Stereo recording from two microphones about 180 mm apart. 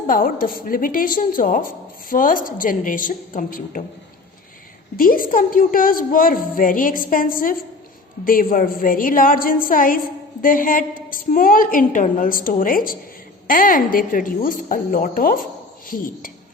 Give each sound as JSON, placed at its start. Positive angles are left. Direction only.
{"t": 0.1, "sound": "a woman's voice", "side_deg": 50}
{"t": 4.9, "sound": "a woman's voice", "side_deg": 50}